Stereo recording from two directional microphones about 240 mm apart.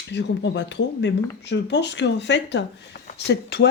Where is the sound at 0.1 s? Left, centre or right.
Left.